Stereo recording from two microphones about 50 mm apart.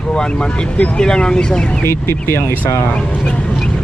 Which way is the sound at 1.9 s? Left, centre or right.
Left.